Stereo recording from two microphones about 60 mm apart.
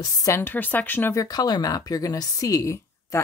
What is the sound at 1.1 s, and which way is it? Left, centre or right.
Speech, left.